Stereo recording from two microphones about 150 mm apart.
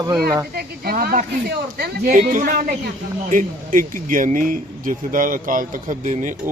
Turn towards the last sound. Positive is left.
turn(degrees=-60)  # may be behind; listen again after turning